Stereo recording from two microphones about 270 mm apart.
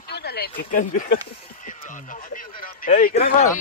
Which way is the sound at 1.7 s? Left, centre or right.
Left.